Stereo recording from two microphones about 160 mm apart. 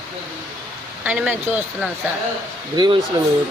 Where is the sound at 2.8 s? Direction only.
25° right (ahead or behind).